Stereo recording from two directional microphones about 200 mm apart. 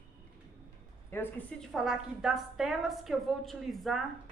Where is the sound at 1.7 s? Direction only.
Centre (ahead or behind).